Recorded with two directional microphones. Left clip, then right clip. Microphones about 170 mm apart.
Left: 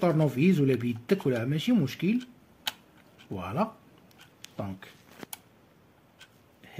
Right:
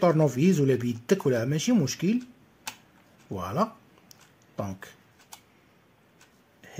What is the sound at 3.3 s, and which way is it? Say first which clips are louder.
Speech: right 3 dB; 55° right (ahead or behind).